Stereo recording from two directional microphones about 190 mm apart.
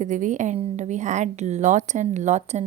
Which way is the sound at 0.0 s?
40° right (ahead or behind).